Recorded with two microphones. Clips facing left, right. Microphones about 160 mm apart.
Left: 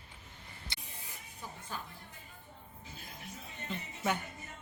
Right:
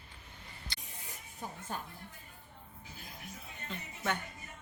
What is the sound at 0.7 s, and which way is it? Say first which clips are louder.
Printer: even; 20° left (ahead or behind).